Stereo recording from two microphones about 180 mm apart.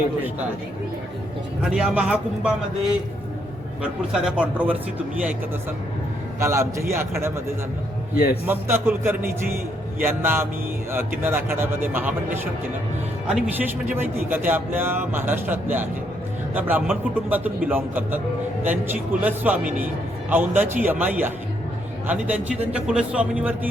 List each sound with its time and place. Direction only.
1.7 s a man's voice: 5° right (ahead or behind)
4.1 s a man's voice: 5° right (ahead or behind)
6.4 s speech: 15° right (ahead or behind)
8.1 s a man's voice: 55° left (ahead or behind)
8.4 s a man's voice: 15° right (ahead or behind)